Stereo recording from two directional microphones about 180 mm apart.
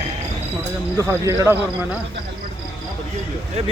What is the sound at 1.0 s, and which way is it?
Speech, 15° right (ahead or behind).